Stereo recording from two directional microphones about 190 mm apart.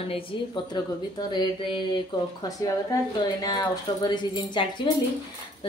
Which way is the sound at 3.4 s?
20° left (ahead or behind).